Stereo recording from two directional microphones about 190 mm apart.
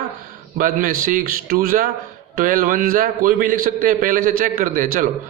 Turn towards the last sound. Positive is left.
turn(degrees=-45)  # may be behind; listen again after turning